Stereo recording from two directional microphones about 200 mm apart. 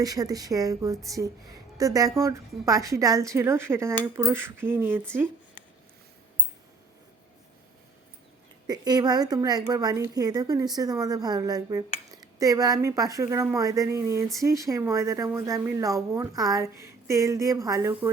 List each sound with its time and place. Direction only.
0.0 s speech: 20° right (ahead or behind)
8.6 s a woman's voice: 20° right (ahead or behind)